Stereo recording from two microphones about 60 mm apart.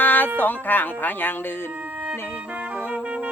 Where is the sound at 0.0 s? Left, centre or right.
Left.